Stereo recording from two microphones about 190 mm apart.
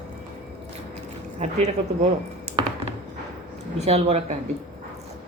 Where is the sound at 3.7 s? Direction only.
35° right (ahead or behind).